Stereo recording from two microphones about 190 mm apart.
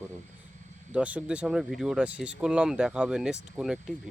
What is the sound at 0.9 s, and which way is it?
Speech, 5° right (ahead or behind).